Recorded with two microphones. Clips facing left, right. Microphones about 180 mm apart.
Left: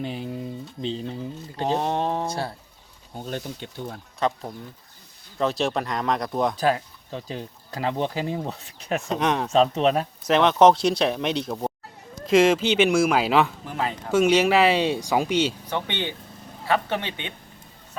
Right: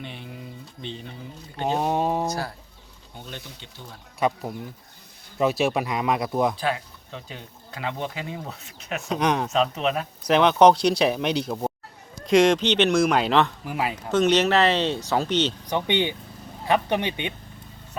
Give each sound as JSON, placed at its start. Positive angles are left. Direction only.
{"t": 0.0, "sound": "speech", "side_deg": 35}
{"t": 1.6, "sound": "speech", "side_deg": -5}
{"t": 3.2, "sound": "speech", "side_deg": 45}
{"t": 4.2, "sound": "speech", "side_deg": -5}
{"t": 6.6, "sound": "speech", "side_deg": 40}
{"t": 9.0, "sound": "speech", "side_deg": 0}
{"t": 9.5, "sound": "speech", "side_deg": 35}
{"t": 10.2, "sound": "speech", "side_deg": 0}
{"t": 13.7, "sound": "speech", "side_deg": -10}
{"t": 14.1, "sound": "speech", "side_deg": 10}
{"t": 15.6, "sound": "speech", "side_deg": -15}